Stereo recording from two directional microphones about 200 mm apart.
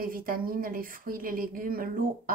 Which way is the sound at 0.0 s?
45° right (ahead or behind).